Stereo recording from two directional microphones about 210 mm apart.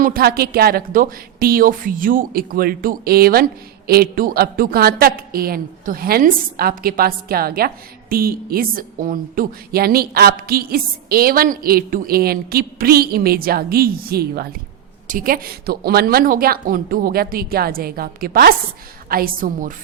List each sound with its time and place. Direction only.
0.0 s a woman's voice: 45° right (ahead or behind)